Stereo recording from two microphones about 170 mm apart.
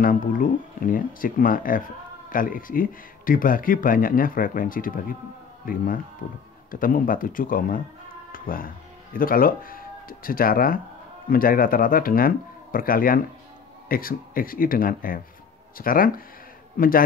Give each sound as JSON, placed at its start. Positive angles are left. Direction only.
{"t": 0.0, "sound": "a man's voice", "side_deg": 55}